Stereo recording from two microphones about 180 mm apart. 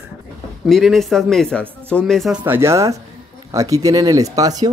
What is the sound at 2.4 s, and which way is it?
Speech, 15° right (ahead or behind).